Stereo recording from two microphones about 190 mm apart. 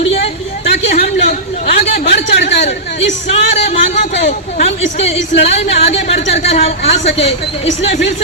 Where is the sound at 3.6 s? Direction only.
35° left (ahead or behind).